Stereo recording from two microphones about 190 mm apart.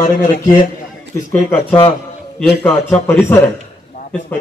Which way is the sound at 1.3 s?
10° left (ahead or behind).